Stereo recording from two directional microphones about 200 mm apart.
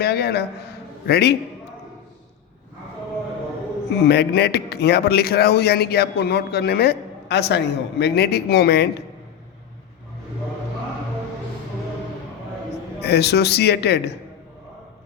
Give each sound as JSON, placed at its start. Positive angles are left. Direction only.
{"t": 0.0, "sound": "a man's voice", "side_deg": 55}
{"t": 4.0, "sound": "speech", "side_deg": 55}
{"t": 13.0, "sound": "speech", "side_deg": 55}